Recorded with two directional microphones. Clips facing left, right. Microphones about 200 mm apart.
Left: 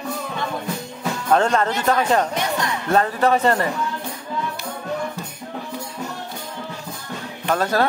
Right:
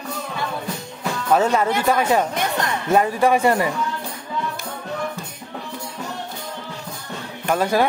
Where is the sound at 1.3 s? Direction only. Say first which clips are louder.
Right 1 dB; 5° right (ahead or behind).